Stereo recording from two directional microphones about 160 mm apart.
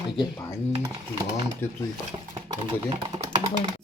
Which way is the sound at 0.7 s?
30° right (ahead or behind).